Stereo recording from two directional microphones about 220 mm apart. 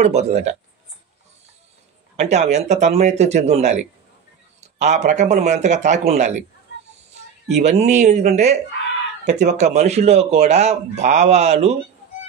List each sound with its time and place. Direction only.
0.0 s speech: 30° right (ahead or behind)
2.1 s speech: 30° right (ahead or behind)
7.4 s speech: 30° right (ahead or behind)